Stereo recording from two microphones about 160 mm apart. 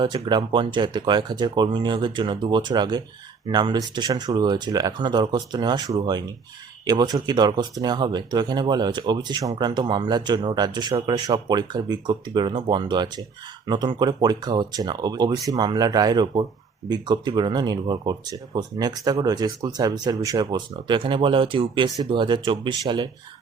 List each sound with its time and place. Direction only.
0.0 s speech: 30° right (ahead or behind)